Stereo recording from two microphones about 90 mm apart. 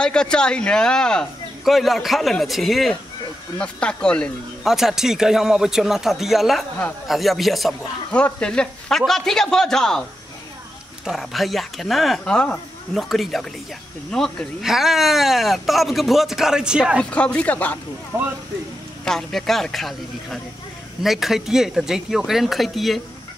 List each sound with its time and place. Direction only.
0.0 s speech: 10° left (ahead or behind)
3.5 s speech: 10° left (ahead or behind)
4.6 s speech: 5° right (ahead or behind)
8.1 s speech: 10° left (ahead or behind)
11.1 s speech: centre (ahead or behind)
17.0 s speech: 15° left (ahead or behind)
18.1 s speech: 25° right (ahead or behind)
19.0 s speech: 5° left (ahead or behind)